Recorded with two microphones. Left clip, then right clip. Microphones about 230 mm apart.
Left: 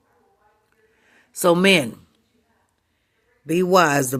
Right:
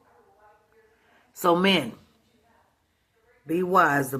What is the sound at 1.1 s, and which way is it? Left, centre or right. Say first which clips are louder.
Speech: left 4 dB; left.